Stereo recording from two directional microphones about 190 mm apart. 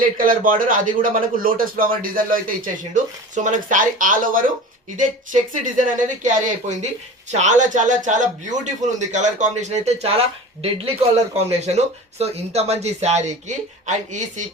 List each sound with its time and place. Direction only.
0.0 s a man's voice: 45° right (ahead or behind)